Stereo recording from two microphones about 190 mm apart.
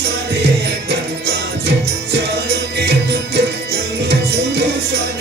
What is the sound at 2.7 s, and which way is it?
Music, 60° right (ahead or behind).